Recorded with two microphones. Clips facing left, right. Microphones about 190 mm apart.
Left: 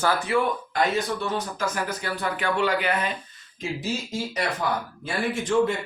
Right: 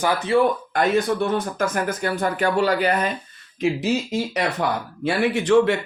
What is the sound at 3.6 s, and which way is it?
A man's voice, 70° right (ahead or behind).